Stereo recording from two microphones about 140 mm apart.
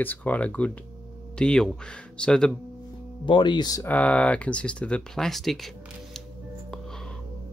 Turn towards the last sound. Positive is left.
turn(degrees=5)  # may be behind; listen again after turning